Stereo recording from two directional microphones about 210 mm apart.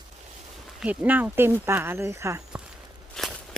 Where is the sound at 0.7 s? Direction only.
5° right (ahead or behind).